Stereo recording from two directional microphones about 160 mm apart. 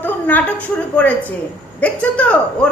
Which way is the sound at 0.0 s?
10° left (ahead or behind).